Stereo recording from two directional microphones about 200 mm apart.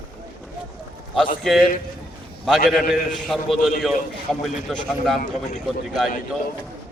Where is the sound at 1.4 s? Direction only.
Centre (ahead or behind).